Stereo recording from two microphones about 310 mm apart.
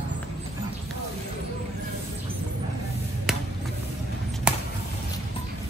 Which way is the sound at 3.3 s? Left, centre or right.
Centre.